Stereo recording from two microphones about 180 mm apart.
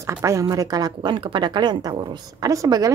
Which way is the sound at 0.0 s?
15° right (ahead or behind).